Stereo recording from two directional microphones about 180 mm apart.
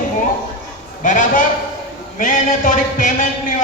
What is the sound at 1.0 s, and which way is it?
Speech, 45° left (ahead or behind).